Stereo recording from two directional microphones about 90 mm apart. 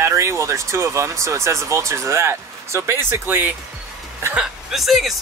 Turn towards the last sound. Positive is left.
turn(degrees=0)  # may be behind; listen again after turning